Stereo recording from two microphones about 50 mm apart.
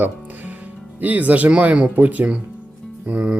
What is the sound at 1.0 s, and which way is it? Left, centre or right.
Speech, right.